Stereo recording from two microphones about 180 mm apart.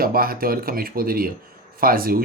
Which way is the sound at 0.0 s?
55° right (ahead or behind).